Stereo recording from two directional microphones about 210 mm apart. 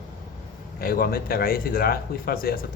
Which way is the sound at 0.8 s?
45° left (ahead or behind).